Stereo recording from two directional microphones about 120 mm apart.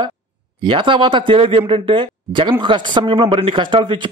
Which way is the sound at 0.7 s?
45° right (ahead or behind).